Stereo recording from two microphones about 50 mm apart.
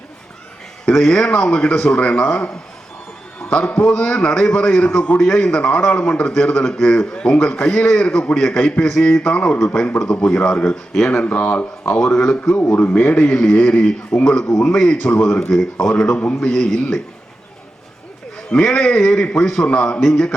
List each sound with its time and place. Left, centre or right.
0.9 s a man's voice: centre
11.1 s a man's voice: left
12.7 s a man's voice: left
13.5 s a man's voice: centre
18.3 s a man's voice: centre